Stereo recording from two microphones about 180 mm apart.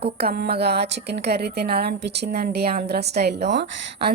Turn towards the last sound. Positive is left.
turn(degrees=-70)  # may be behind; listen again after turning